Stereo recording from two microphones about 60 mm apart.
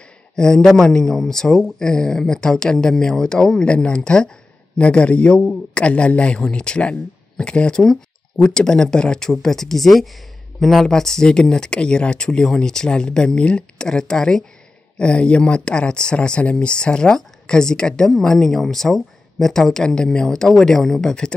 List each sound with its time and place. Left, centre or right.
0.4 s a man's voice: centre